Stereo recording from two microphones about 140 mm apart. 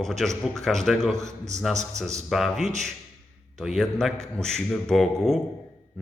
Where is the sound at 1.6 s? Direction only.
Centre (ahead or behind).